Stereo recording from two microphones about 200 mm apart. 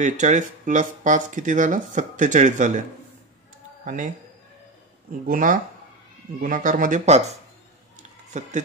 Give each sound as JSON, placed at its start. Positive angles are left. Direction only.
{"t": 0.0, "sound": "speech", "side_deg": -35}
{"t": 3.8, "sound": "speech", "side_deg": -40}
{"t": 5.2, "sound": "speech", "side_deg": -45}